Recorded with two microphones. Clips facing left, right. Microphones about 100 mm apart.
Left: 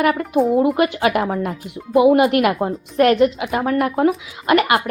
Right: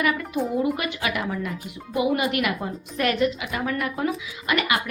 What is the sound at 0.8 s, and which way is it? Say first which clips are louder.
Speech: left 10 dB; 55° left (ahead or behind).